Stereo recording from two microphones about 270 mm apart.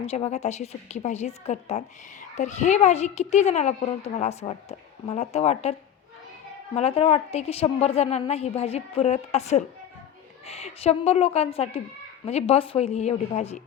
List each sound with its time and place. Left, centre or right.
0.0 s a woman's voice: left
6.7 s a woman's voice: left